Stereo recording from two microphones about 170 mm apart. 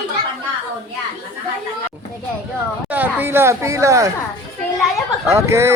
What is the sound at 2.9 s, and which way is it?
Speech, 10° right (ahead or behind).